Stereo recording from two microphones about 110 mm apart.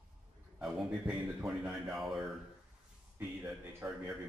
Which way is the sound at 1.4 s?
5° right (ahead or behind).